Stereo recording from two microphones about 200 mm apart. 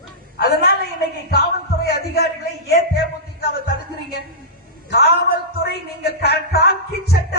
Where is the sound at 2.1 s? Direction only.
50° left (ahead or behind).